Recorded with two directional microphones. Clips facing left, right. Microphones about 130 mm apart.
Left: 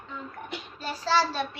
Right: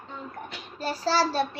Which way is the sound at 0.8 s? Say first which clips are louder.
Right 1 dB; 35° right (ahead or behind).